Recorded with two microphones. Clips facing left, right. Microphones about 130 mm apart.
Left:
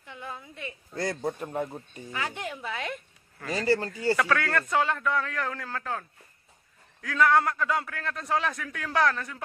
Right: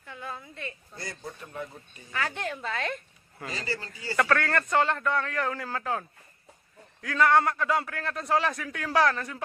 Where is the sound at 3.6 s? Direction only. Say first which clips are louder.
Left 12 dB; 55° left (ahead or behind).